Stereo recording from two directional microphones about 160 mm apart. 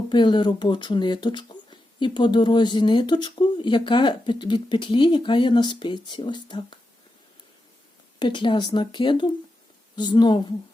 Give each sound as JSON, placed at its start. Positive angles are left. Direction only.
{"t": 0.1, "sound": "speech", "side_deg": 30}
{"t": 8.2, "sound": "speech", "side_deg": 30}